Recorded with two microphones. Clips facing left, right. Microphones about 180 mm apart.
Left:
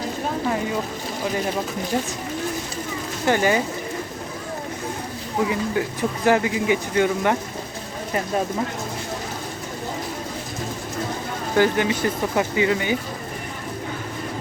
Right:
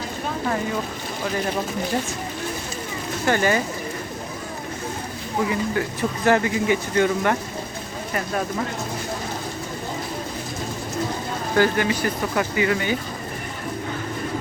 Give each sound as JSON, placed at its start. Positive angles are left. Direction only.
{"t": 3.2, "sound": "speech", "side_deg": 15}
{"t": 5.5, "sound": "speech", "side_deg": 15}
{"t": 11.5, "sound": "speech", "side_deg": 20}